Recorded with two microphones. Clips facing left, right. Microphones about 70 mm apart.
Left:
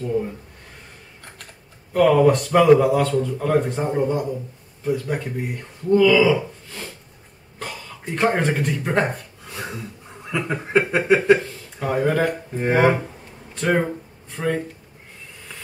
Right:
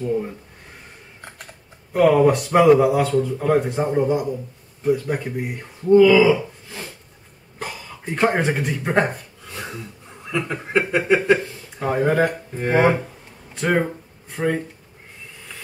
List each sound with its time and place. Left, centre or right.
0.0 s speech: centre
2.0 s speech: centre
6.3 s a sound: centre
7.5 s speech: centre
9.5 s a sound: centre
10.3 s speech: centre
10.9 s speech: centre
11.8 s speech: centre
13.6 s speech: centre